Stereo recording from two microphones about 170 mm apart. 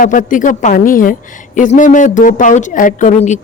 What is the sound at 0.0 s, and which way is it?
Speech, 50° left (ahead or behind).